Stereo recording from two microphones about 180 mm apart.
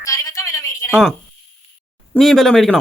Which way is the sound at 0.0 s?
20° left (ahead or behind).